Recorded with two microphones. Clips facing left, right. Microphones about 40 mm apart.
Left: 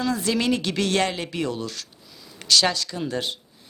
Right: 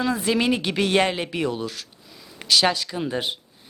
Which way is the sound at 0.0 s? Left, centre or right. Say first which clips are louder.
Right 2 dB; centre.